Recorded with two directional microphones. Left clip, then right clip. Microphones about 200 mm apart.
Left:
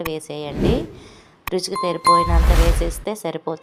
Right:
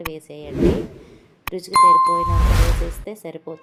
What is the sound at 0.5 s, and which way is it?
Speech, centre (ahead or behind).